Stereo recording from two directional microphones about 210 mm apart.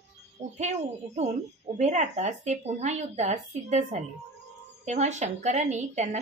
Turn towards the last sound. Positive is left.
turn(degrees=-35)  # may be behind; listen again after turning